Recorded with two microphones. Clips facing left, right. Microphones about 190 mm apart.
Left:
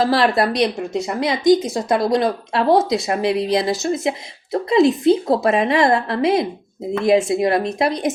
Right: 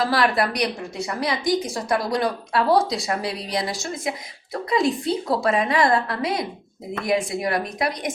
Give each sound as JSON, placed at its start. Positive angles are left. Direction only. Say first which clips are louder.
{"t": 0.1, "sound": "a woman's voice", "louder": "left 4 dB", "side_deg": 25}